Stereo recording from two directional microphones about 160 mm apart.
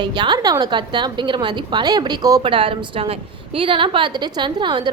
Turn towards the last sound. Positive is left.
turn(degrees=-30)  # may be behind; listen again after turning